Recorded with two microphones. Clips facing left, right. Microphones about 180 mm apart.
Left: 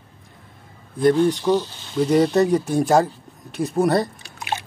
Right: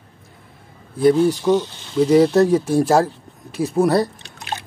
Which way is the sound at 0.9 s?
5° right (ahead or behind).